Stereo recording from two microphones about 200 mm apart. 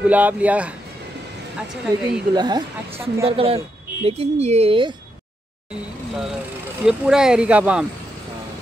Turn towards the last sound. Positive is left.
turn(degrees=-5)  # may be behind; listen again after turning